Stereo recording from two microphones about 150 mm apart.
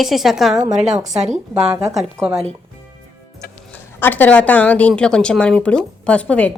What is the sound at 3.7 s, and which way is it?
A woman's voice, 10° left (ahead or behind).